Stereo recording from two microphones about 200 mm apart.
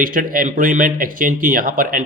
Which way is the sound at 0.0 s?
45° right (ahead or behind).